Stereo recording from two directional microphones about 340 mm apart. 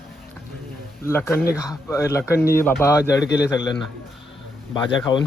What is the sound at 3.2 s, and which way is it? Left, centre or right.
Speech, left.